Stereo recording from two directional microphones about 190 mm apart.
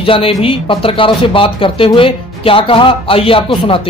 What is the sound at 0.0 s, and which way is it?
Speech, 30° left (ahead or behind).